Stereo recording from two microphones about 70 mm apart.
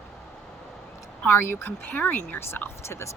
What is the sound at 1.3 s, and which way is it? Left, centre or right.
Speech, left.